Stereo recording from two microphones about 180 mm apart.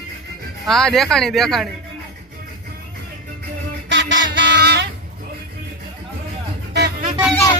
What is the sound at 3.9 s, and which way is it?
Music, 85° right.